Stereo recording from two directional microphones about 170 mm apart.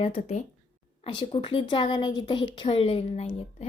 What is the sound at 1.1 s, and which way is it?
A woman's voice, 30° left (ahead or behind).